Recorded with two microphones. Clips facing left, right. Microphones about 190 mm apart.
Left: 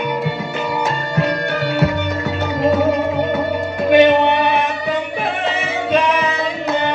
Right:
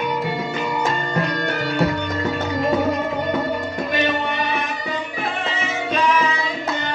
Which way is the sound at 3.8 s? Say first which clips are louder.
Left 13 dB; 65° left (ahead or behind).